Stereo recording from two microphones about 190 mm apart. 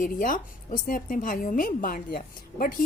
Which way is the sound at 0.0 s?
45° left (ahead or behind).